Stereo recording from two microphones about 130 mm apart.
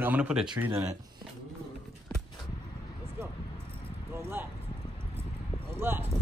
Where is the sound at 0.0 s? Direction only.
10° right (ahead or behind).